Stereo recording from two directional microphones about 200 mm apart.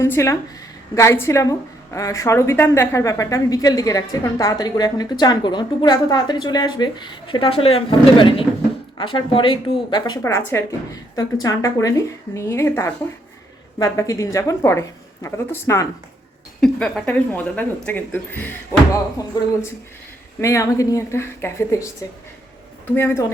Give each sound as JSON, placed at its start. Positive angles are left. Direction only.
{"t": 0.0, "sound": "a woman's voice", "side_deg": 15}
{"t": 23.0, "sound": "a woman's voice", "side_deg": 10}